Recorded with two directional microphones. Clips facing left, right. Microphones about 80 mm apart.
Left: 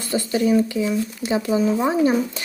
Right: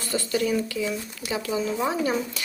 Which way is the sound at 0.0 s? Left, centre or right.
Left.